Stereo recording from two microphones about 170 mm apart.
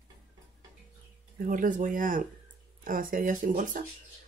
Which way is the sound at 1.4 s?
55° right (ahead or behind).